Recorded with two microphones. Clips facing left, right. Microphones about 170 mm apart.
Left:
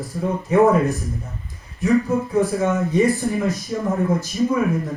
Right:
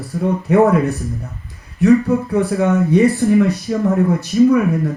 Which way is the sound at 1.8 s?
65° right (ahead or behind).